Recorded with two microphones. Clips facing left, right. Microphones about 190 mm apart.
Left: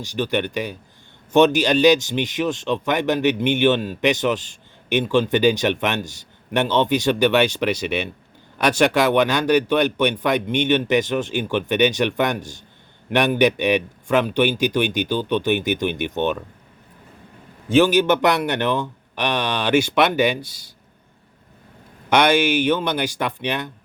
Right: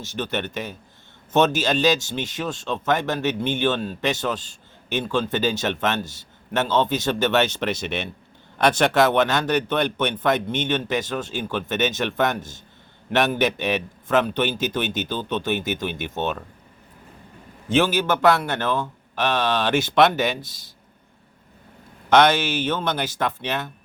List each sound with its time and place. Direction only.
0.0 s speech: 15° left (ahead or behind)
17.7 s speech: 15° left (ahead or behind)
22.1 s speech: 10° left (ahead or behind)